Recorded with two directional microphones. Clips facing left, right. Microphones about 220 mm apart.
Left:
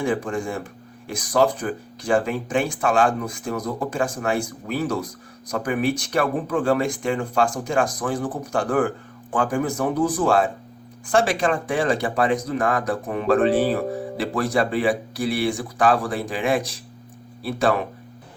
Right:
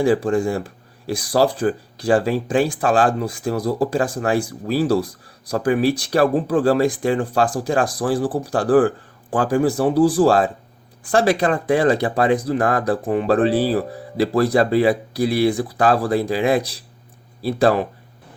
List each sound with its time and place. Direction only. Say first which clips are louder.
0.0 s speech: right 7 dB; 35° right (ahead or behind)
11.9 s speech: right 3 dB; 35° right (ahead or behind)